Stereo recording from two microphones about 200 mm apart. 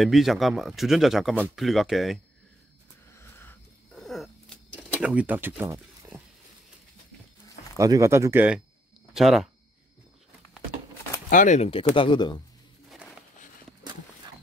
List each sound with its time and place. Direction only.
0.0 s speech: centre (ahead or behind)
3.1 s a sound: 10° left (ahead or behind)
4.9 s speech: 5° right (ahead or behind)
7.7 s speech: 15° right (ahead or behind)
11.2 s speech: 40° left (ahead or behind); by 12.4 s 25° left (ahead or behind)
12.9 s a sound: centre (ahead or behind)